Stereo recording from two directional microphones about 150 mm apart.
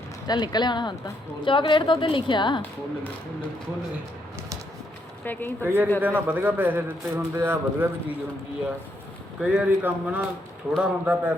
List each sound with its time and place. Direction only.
0.3 s a woman's voice: 30° left (ahead or behind)
5.2 s speech: 10° left (ahead or behind)
5.6 s a man's voice: 15° right (ahead or behind)
9.4 s a man's voice: 5° right (ahead or behind)